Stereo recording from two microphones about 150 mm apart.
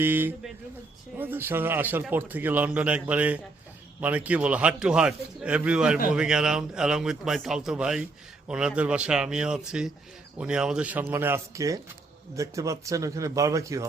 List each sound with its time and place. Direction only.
0.0 s a man's voice: 15° right (ahead or behind)